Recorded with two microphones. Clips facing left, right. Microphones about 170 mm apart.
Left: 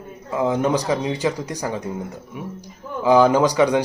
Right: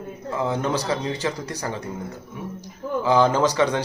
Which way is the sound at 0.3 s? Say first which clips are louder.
Left 5 dB; 15° left (ahead or behind).